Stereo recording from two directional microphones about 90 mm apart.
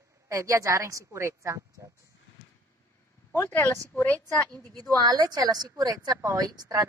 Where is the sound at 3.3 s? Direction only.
25° left (ahead or behind).